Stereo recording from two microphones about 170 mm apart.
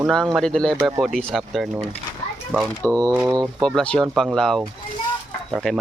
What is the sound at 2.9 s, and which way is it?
Speech, 20° right (ahead or behind).